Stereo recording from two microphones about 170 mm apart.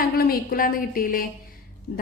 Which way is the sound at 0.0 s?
60° left (ahead or behind).